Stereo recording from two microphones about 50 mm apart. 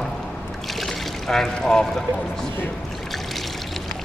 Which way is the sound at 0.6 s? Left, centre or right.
Centre.